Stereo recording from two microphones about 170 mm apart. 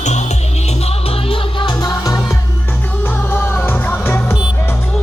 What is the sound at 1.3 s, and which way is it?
Music, 25° left (ahead or behind).